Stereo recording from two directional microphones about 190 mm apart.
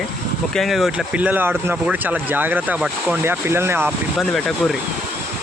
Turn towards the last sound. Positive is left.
turn(degrees=0)  # may be behind; listen again after turning